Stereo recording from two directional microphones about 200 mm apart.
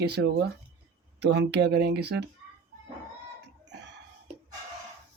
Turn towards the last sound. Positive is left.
turn(degrees=-60)  # may be behind; listen again after turning